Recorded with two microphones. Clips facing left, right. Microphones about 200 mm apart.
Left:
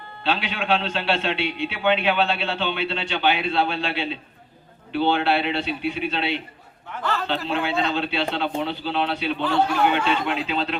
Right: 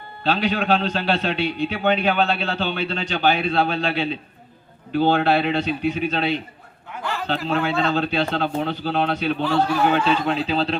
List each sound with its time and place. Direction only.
0.3 s a man's voice: 40° right (ahead or behind)
7.0 s a sound: 15° right (ahead or behind)
7.3 s a man's voice: 40° right (ahead or behind)
9.4 s a man's voice: 10° right (ahead or behind)
9.9 s a man's voice: 35° right (ahead or behind)